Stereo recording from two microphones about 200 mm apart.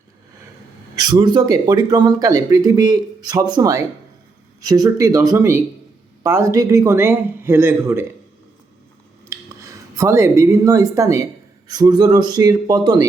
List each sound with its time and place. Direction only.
0.9 s a man's voice: 20° right (ahead or behind)
9.3 s speech: 15° right (ahead or behind)